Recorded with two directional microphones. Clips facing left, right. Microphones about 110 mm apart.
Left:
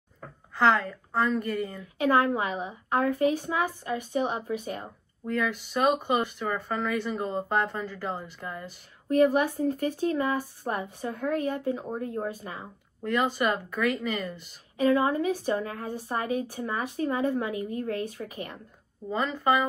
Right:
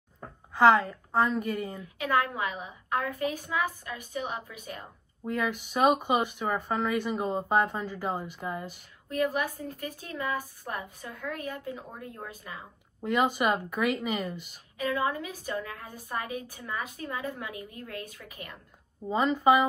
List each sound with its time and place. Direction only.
0.6 s speech: 10° right (ahead or behind)
2.0 s a woman's voice: 35° left (ahead or behind)
5.2 s speech: 5° right (ahead or behind)
9.1 s a woman's voice: 35° left (ahead or behind)
13.0 s speech: 10° right (ahead or behind)
14.8 s a woman's voice: 40° left (ahead or behind)
19.1 s speech: 10° right (ahead or behind)